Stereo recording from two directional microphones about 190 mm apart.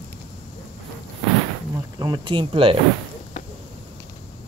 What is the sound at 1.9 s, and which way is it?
Speech, 20° right (ahead or behind).